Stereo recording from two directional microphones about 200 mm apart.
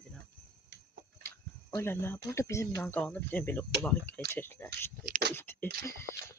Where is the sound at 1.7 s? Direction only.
10° left (ahead or behind).